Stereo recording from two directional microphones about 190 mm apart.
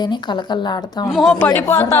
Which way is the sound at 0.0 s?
25° left (ahead or behind).